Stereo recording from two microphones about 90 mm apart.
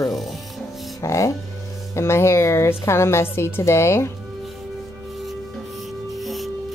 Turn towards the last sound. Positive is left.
turn(degrees=0)  # may be behind; listen again after turning